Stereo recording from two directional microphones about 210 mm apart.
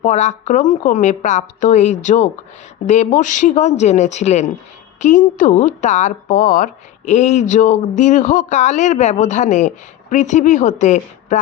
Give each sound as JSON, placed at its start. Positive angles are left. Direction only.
{"t": 0.0, "sound": "speech", "side_deg": 35}